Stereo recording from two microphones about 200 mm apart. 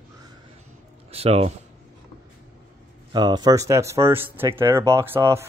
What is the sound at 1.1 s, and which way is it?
Speech, 30° right (ahead or behind).